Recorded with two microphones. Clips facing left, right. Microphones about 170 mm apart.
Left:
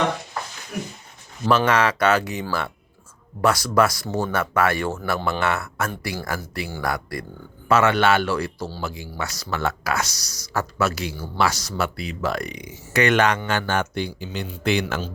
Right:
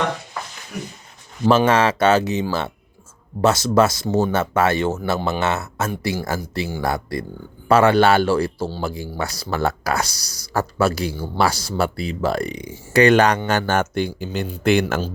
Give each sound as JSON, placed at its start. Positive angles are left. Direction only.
{"t": 1.5, "sound": "speech", "side_deg": -30}